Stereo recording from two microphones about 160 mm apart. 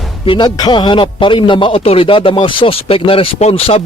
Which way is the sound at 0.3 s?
25° left (ahead or behind).